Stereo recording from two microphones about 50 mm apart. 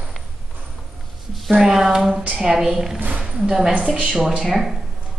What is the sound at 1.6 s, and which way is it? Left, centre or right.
A woman's voice, centre.